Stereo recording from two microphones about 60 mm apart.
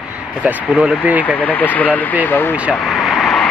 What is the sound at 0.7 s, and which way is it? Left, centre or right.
Speech, right.